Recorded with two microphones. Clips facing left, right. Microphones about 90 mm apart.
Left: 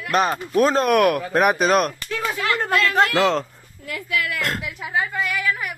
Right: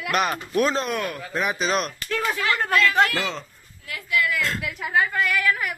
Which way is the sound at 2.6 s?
30° left (ahead or behind).